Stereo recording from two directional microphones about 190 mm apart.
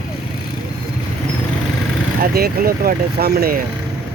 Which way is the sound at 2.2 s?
50° right (ahead or behind).